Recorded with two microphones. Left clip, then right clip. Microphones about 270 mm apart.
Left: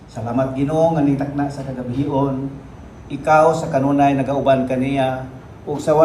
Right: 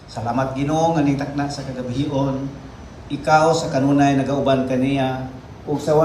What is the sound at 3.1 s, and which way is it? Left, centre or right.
A man's voice, centre.